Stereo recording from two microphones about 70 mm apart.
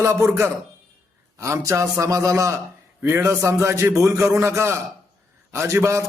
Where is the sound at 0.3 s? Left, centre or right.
Right.